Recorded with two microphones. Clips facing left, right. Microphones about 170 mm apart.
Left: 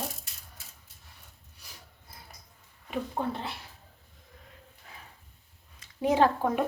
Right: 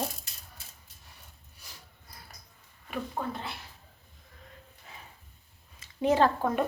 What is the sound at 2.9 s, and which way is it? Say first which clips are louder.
Speech: left 2 dB; 20° left (ahead or behind).